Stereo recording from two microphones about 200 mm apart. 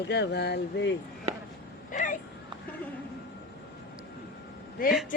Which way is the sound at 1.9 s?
40° left (ahead or behind).